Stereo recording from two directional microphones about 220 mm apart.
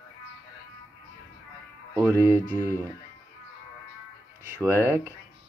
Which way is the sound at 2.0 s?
10° right (ahead or behind).